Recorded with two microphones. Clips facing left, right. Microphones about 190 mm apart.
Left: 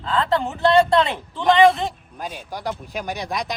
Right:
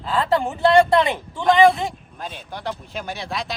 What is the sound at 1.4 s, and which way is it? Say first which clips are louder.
Speech: even; centre (ahead or behind).